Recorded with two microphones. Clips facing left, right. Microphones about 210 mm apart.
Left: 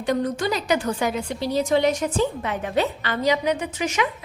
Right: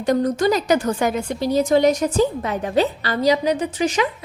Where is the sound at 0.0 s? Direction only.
40° right (ahead or behind).